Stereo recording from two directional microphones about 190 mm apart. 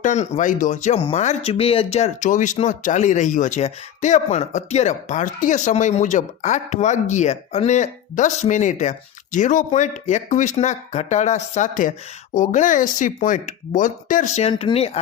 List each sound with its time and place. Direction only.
0.0 s speech: 40° left (ahead or behind)